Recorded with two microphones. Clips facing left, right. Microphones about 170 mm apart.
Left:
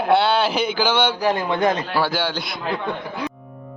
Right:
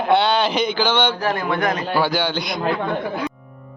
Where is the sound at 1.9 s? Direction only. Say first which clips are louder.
Right 2 dB; centre (ahead or behind).